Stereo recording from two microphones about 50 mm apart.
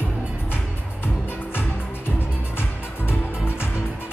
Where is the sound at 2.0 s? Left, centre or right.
Left.